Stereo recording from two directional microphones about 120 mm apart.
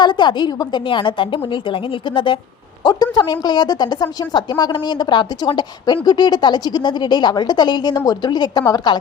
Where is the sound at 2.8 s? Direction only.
35° left (ahead or behind).